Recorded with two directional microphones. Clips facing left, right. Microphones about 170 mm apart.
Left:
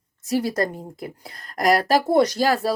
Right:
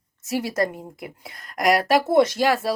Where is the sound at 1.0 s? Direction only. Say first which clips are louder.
Left 2 dB; 35° left (ahead or behind).